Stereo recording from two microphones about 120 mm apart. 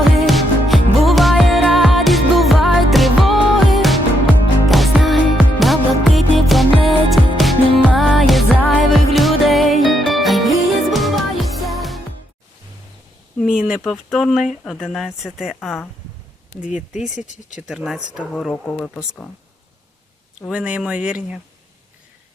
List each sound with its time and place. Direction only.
0.0 s music: centre (ahead or behind)
13.4 s a sound: 5° right (ahead or behind)
13.8 s speech: centre (ahead or behind)
17.2 s speech: 90° left
17.7 s speech: 5° right (ahead or behind)
18.5 s speech: 10° left (ahead or behind)
20.5 s speech: 10° right (ahead or behind)